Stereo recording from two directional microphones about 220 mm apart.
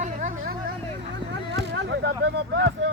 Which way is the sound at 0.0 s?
35° right (ahead or behind).